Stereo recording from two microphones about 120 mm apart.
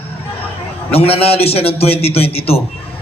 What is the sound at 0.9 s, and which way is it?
A man's voice, 55° left (ahead or behind).